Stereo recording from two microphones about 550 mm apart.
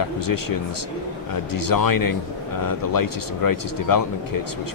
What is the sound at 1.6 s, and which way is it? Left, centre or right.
Speech, left.